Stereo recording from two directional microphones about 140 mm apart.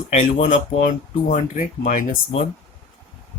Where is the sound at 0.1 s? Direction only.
50° left (ahead or behind).